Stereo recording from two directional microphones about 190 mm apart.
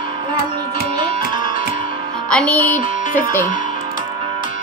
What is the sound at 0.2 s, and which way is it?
Music, 25° right (ahead or behind).